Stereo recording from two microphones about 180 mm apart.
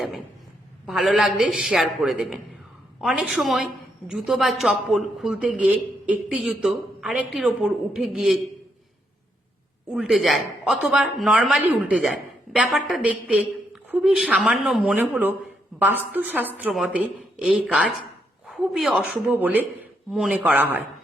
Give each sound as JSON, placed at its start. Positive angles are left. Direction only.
{"t": 0.9, "sound": "speech", "side_deg": 0}
{"t": 9.9, "sound": "speech", "side_deg": -5}